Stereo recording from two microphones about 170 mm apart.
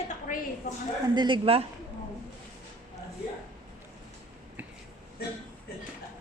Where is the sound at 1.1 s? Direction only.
25° right (ahead or behind).